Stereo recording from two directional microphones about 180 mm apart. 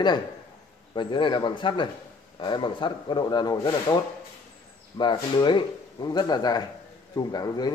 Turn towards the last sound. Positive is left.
turn(degrees=20)  # may be behind; listen again after turning